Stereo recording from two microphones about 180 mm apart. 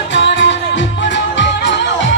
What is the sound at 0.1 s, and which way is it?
Music, 80° left.